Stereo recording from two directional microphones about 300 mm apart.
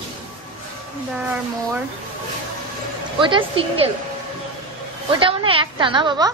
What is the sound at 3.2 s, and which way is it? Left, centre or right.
Speech, centre.